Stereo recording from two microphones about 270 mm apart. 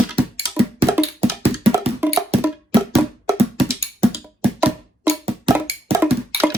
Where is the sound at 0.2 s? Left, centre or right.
Right.